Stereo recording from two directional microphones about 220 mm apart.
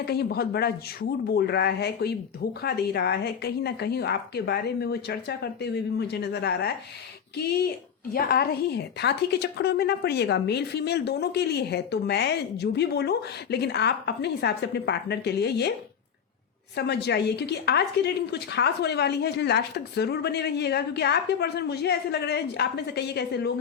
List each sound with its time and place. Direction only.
0.0 s a woman's voice: 45° left (ahead or behind)
16.7 s a woman's voice: 50° left (ahead or behind)